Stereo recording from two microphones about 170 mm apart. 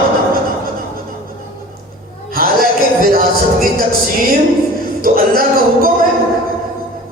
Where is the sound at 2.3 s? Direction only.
60° right (ahead or behind).